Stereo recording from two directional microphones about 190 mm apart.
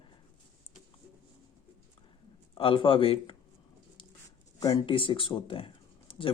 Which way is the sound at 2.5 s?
25° left (ahead or behind).